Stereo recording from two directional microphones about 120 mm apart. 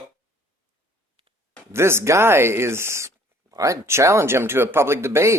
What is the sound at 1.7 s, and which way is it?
Speech, 20° right (ahead or behind).